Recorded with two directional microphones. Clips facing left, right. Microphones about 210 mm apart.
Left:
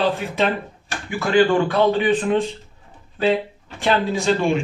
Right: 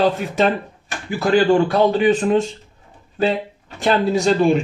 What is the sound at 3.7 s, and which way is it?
Speech, 45° right (ahead or behind).